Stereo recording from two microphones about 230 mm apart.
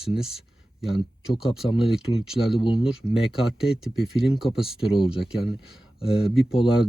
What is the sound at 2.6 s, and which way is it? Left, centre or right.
Speech, left.